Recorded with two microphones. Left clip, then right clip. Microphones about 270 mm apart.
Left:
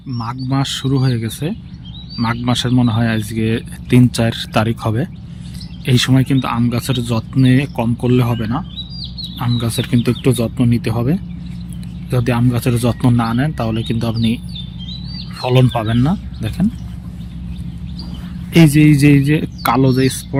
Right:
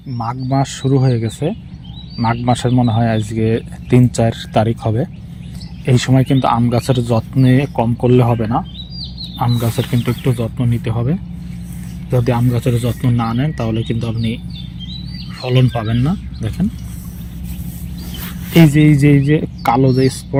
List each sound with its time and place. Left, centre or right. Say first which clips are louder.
0.2 s speech: right 3 dB; centre
18.5 s speech: even; centre